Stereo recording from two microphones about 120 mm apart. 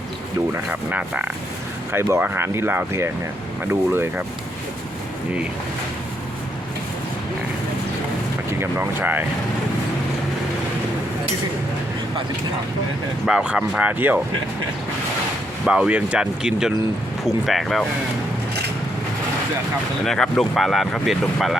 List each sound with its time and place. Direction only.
0.7 s speech: 10° right (ahead or behind)
1.9 s speech: 20° right (ahead or behind)
8.6 s speech: 15° right (ahead or behind)
13.2 s speech: 5° right (ahead or behind)
15.6 s speech: 10° right (ahead or behind)
20.1 s speech: 5° left (ahead or behind)